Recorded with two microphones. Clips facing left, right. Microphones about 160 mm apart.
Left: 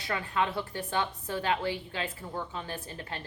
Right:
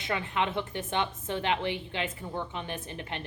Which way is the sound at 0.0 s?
20° right (ahead or behind).